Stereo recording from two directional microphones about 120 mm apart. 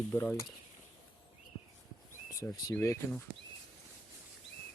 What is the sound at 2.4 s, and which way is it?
Speech, 25° left (ahead or behind).